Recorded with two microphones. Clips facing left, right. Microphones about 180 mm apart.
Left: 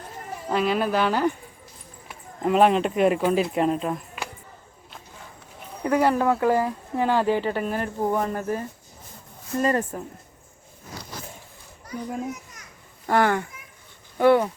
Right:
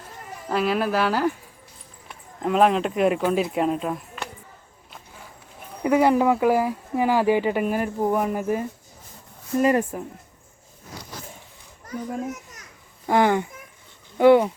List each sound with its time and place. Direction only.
0.4 s speech: centre (ahead or behind)
5.8 s speech: 15° right (ahead or behind)
13.1 s speech: 15° right (ahead or behind)